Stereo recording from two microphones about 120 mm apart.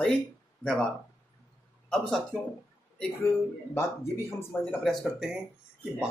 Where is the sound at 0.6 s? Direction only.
5° left (ahead or behind).